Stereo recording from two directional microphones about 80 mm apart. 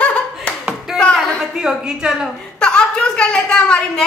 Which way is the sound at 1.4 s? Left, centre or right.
Centre.